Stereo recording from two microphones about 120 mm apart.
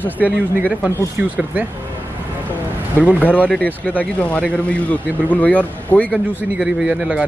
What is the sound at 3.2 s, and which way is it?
A man's voice, 10° left (ahead or behind).